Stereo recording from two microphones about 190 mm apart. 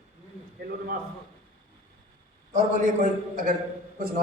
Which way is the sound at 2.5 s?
40° right (ahead or behind).